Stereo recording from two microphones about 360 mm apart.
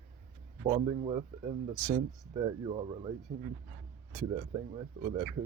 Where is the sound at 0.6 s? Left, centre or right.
Centre.